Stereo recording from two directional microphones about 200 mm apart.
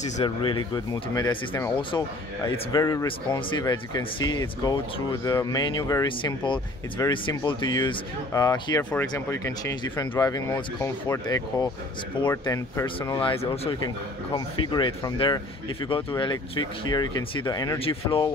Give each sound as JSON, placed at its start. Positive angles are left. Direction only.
{"t": 0.2, "sound": "speech", "side_deg": 25}
{"t": 1.3, "sound": "speech", "side_deg": 10}
{"t": 1.8, "sound": "speech", "side_deg": 25}
{"t": 12.8, "sound": "speech", "side_deg": 25}